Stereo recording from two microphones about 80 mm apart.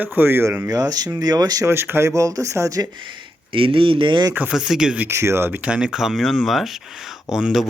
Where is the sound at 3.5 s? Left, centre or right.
Right.